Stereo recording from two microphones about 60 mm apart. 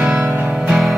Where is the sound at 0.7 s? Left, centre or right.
Centre.